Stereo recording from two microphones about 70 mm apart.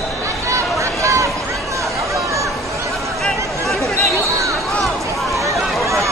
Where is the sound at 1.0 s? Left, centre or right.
Right.